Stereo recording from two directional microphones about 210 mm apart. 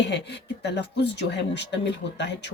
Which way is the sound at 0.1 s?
55° left (ahead or behind).